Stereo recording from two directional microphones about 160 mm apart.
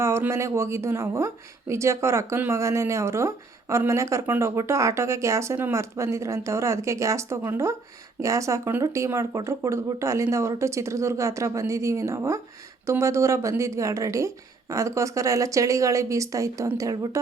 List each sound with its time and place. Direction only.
0.0 s speech: 15° right (ahead or behind)